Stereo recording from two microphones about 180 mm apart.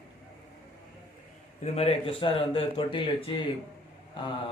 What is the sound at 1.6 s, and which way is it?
Speech, 35° left (ahead or behind).